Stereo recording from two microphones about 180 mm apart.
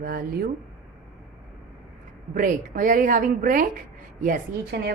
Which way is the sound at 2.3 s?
50° right (ahead or behind).